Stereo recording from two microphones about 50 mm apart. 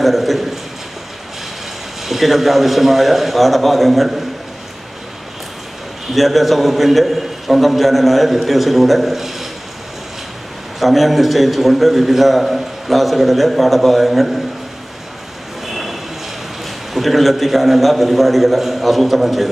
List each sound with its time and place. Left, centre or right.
0.0 s a man's voice: centre
2.0 s a man's voice: centre
6.1 s a man's voice: centre
10.8 s a man's voice: centre
15.6 s train: centre
16.6 s a man's voice: centre